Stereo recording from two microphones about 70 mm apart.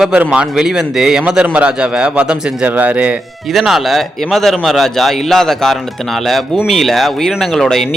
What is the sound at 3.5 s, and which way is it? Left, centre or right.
Speech, centre.